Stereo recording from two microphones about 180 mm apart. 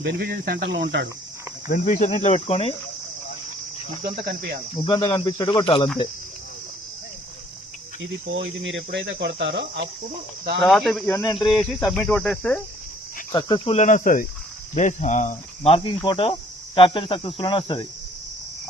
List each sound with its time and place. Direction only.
0.0 s speech: 60° right (ahead or behind); by 1.0 s 75° right (ahead or behind)
1.6 s cricket: 45° left (ahead or behind)
4.8 s speech: 30° left (ahead or behind)
8.3 s speech: 90° right; by 9.8 s 75° right (ahead or behind)
10.6 s cricket: centre (ahead or behind)
13.3 s speech: 25° left (ahead or behind)
13.7 s speech: 45° left (ahead or behind); by 17.8 s 25° left (ahead or behind)